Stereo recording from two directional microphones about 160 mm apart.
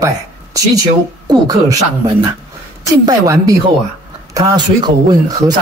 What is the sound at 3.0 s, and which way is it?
A woman's voice, 20° right (ahead or behind).